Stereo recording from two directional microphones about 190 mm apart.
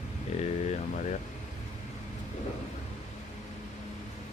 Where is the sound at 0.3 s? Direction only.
35° left (ahead or behind).